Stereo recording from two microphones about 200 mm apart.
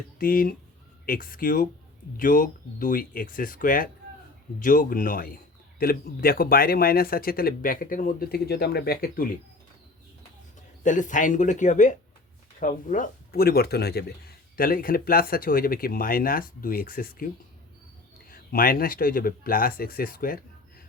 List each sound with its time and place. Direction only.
0.2 s speech: 45° left (ahead or behind)
10.8 s speech: 40° left (ahead or behind)